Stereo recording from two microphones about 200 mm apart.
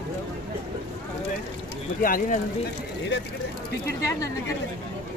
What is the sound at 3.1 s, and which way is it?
Speech, 55° left (ahead or behind).